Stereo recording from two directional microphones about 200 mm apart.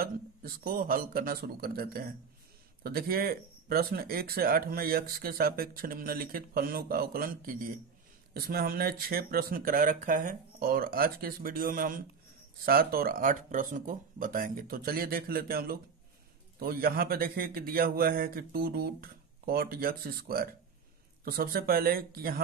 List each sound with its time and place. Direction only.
0.0 s speech: 45° right (ahead or behind)